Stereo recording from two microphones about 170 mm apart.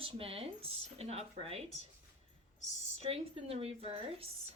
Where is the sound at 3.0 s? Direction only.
35° right (ahead or behind).